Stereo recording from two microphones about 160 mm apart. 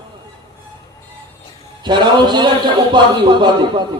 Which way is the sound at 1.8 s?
30° right (ahead or behind).